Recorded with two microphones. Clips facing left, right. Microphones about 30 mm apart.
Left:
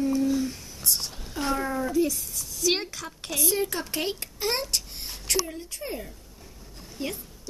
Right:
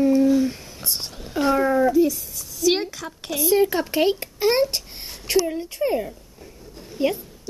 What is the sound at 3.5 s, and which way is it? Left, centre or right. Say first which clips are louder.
Speech: right 13 dB; centre.